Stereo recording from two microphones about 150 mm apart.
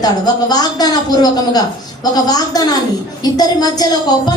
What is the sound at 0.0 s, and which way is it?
Speech, 25° left (ahead or behind).